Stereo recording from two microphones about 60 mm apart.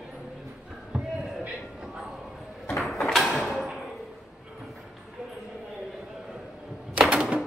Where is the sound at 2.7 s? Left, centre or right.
Centre.